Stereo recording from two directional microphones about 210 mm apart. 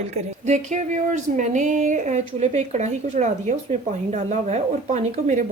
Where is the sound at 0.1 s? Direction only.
35° right (ahead or behind).